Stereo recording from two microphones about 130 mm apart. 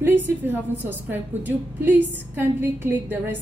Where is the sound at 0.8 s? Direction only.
15° right (ahead or behind).